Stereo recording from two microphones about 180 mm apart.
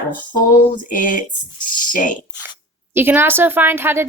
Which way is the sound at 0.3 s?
50° left (ahead or behind).